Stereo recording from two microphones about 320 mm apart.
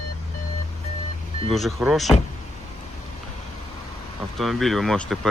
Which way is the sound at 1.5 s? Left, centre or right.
Centre.